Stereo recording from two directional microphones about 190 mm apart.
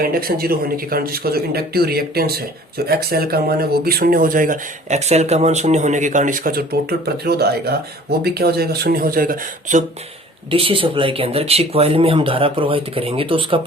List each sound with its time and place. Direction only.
0.0 s speech: 50° right (ahead or behind)
10.5 s speech: 30° right (ahead or behind)